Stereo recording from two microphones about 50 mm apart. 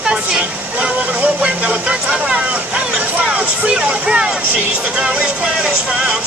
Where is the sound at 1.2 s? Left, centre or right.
Right.